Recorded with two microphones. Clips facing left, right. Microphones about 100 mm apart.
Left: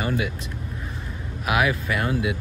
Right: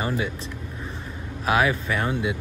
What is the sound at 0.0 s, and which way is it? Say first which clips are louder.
Speech: left 1 dB; 30° right (ahead or behind).